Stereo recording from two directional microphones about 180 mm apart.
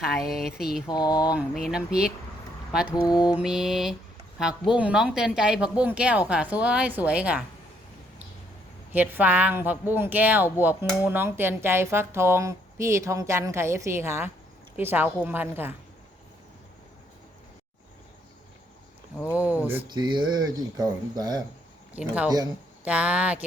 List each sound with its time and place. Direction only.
0.2 s speech: centre (ahead or behind)
0.9 s speech: 20° left (ahead or behind)
1.3 s speech: 5° right (ahead or behind)
2.9 s speech: 25° left (ahead or behind)
3.3 s speech: 5° right (ahead or behind)
8.9 s speech: 10° right (ahead or behind)
19.3 s speech: 10° right (ahead or behind)
19.9 s speech: 25° right (ahead or behind)
21.9 s speech: 5° right (ahead or behind)